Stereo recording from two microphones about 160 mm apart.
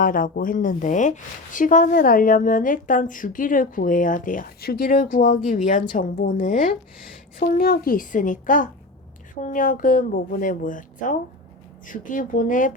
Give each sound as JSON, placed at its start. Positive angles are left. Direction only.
{"t": 0.0, "sound": "speech", "side_deg": 60}